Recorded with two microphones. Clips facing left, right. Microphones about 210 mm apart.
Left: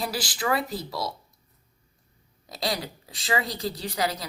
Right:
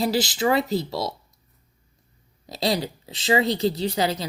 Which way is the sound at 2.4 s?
25° right (ahead or behind).